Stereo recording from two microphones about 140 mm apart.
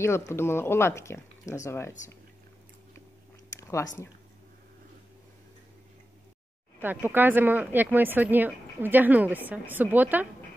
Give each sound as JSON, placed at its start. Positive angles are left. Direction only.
{"t": 0.0, "sound": "speech", "side_deg": 20}
{"t": 3.5, "sound": "a sound", "side_deg": 20}
{"t": 6.8, "sound": "speech", "side_deg": -15}